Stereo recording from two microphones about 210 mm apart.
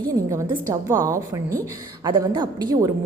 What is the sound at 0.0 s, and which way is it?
A woman's voice, 15° right (ahead or behind).